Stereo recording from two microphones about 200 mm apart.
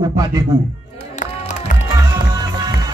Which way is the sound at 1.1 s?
40° left (ahead or behind).